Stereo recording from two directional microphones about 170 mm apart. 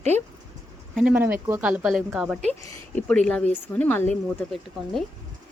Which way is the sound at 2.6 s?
10° left (ahead or behind).